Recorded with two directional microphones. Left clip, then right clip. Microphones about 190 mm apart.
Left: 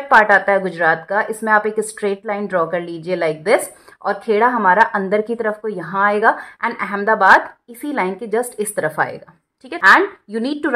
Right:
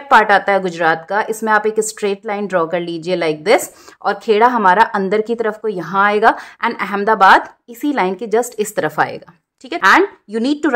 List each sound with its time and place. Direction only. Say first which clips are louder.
0.1 s a woman's voice: right 1 dB; 30° right (ahead or behind)